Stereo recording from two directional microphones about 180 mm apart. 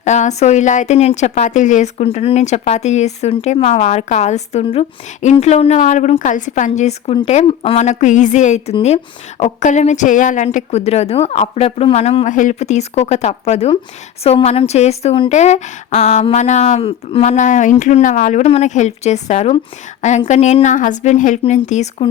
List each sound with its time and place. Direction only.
0.0 s speech: 40° left (ahead or behind)